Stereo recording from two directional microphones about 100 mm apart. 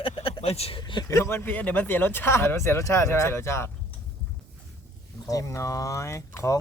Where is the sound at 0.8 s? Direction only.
50° left (ahead or behind).